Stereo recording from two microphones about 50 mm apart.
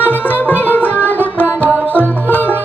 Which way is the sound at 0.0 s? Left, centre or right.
Left.